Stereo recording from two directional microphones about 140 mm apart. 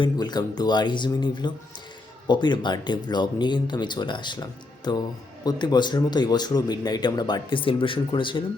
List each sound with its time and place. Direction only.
0.0 s speech: 30° left (ahead or behind)
5.5 s speech: 30° left (ahead or behind)